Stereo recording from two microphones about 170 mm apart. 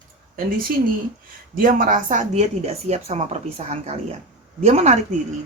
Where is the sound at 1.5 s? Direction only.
55° right (ahead or behind).